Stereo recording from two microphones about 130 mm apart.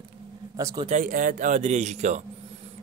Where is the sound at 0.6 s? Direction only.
25° right (ahead or behind).